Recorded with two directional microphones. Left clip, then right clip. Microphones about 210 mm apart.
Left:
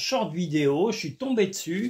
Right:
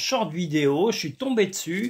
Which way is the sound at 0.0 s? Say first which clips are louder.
Right 2 dB; 25° right (ahead or behind).